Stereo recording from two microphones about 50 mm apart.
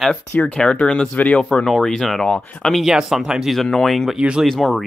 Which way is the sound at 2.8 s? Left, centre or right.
Centre.